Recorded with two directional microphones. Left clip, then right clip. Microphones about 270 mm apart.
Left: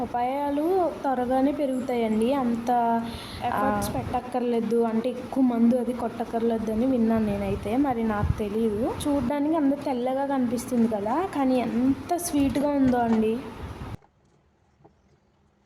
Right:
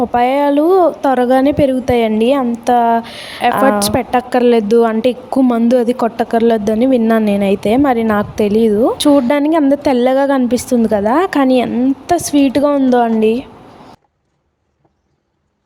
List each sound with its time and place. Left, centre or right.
0.1 s a woman's voice: right